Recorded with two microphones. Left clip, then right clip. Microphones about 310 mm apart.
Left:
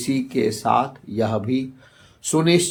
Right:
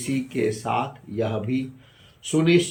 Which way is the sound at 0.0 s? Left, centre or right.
Centre.